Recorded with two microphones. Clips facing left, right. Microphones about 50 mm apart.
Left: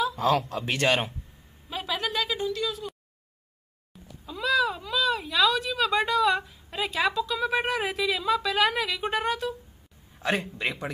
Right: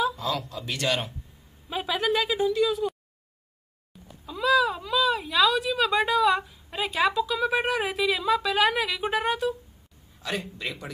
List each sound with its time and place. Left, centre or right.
0.1 s speech: left
1.9 s speech: centre
4.3 s speech: centre
10.2 s speech: left